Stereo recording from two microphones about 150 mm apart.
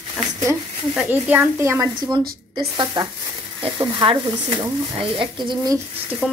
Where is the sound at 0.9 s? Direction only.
10° right (ahead or behind); by 5.8 s 30° right (ahead or behind).